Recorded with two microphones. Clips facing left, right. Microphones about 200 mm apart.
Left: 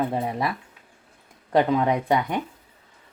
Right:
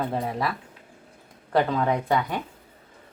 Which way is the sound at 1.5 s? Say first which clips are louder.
Left 2 dB; 15° left (ahead or behind).